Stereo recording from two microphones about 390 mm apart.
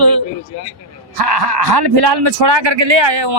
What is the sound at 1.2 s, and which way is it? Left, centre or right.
A man's voice, right.